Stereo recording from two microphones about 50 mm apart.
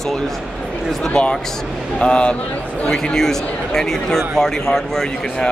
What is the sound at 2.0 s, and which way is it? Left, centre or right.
A man's voice, centre.